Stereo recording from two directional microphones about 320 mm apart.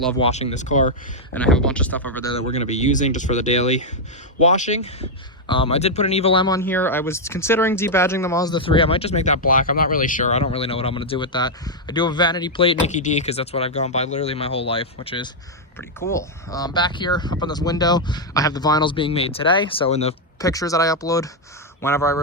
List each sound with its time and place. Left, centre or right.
0.2 s speech: centre
1.3 s speech: centre
2.3 s speech: left